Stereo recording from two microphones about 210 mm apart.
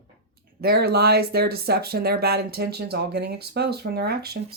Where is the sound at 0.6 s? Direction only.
50° right (ahead or behind).